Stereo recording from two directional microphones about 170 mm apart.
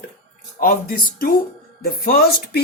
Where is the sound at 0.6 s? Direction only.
55° left (ahead or behind).